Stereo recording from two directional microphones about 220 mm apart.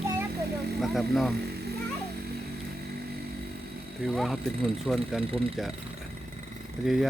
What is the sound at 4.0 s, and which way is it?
Speech, centre (ahead or behind).